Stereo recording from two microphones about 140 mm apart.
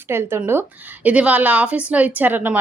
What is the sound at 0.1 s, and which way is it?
A woman's voice, 20° right (ahead or behind).